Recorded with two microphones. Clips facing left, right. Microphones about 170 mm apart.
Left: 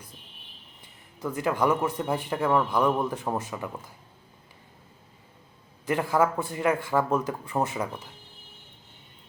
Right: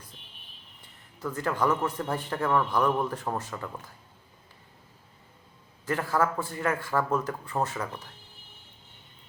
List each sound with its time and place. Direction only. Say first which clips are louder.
1.2 s a man's voice: left 2 dB; 15° left (ahead or behind)
5.8 s a man's voice: left 3 dB; 15° left (ahead or behind)